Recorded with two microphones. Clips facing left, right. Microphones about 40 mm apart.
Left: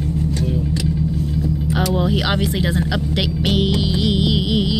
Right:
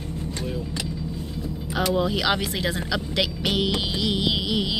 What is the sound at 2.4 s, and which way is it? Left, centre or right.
Speech, centre.